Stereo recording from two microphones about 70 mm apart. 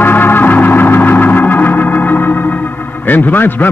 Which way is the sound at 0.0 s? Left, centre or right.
Left.